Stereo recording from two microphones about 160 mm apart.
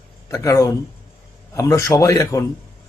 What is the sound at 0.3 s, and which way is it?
A man's voice, 20° left (ahead or behind).